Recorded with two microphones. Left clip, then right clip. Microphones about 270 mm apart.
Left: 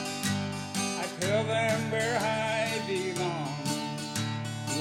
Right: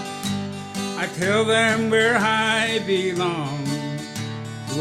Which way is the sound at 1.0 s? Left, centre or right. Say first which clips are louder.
Right 10 dB; right.